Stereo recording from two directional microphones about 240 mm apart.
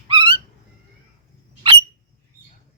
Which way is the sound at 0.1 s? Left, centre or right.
Right.